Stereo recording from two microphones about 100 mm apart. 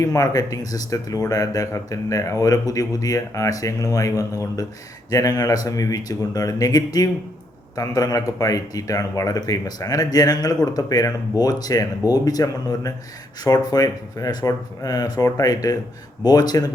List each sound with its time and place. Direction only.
0.0 s speech: 35° left (ahead or behind)